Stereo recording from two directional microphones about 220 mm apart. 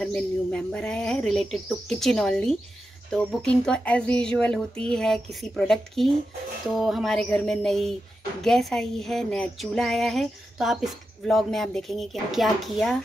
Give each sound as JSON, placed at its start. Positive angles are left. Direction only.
{"t": 0.0, "sound": "a woman's voice", "side_deg": 5}